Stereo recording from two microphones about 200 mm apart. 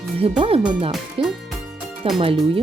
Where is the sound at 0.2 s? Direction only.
30° right (ahead or behind).